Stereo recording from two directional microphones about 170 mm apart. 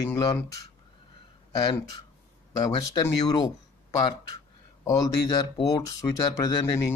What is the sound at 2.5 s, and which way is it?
Speech, 20° left (ahead or behind).